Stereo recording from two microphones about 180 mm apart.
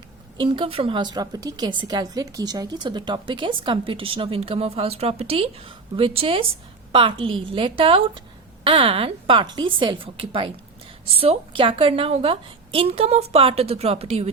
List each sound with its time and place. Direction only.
0.3 s a woman's voice: 25° right (ahead or behind)